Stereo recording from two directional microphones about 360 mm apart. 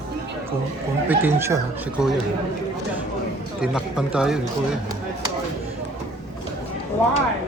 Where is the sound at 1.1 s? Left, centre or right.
Centre.